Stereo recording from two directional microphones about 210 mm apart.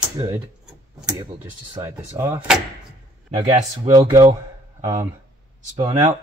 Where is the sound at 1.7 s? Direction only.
15° right (ahead or behind).